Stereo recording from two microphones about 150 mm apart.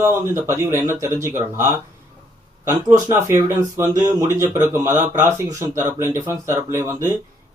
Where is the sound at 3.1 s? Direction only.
20° right (ahead or behind).